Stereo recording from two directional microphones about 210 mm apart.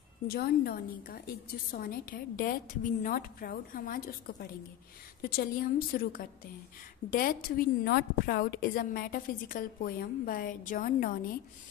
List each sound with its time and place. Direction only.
0.3 s a woman's voice: 45° left (ahead or behind)